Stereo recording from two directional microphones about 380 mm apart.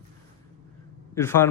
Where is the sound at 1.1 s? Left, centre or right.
Centre.